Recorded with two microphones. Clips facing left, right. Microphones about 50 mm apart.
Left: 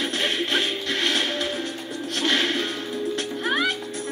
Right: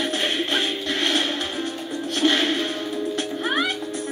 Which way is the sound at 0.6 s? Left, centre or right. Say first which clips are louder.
Right 1 dB; right.